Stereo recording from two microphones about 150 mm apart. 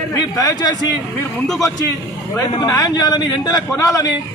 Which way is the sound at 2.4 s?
25° left (ahead or behind).